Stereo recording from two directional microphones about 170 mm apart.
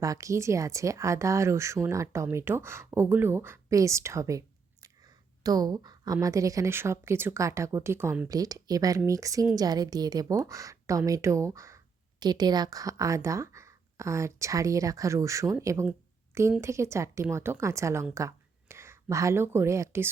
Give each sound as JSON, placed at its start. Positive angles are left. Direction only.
{"t": 0.0, "sound": "speech", "side_deg": -20}